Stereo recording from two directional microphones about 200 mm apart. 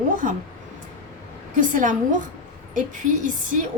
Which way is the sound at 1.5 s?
40° right (ahead or behind).